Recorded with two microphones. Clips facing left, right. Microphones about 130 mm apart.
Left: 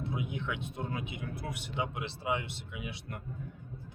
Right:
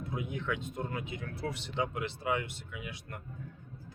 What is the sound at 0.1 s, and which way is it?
Speech, 20° left (ahead or behind).